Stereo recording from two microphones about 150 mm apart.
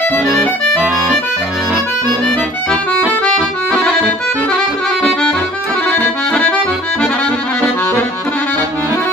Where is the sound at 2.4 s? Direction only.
Centre (ahead or behind).